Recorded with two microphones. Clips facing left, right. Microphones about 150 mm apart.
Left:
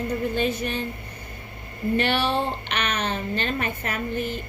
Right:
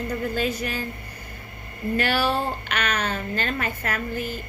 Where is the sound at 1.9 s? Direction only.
25° left (ahead or behind).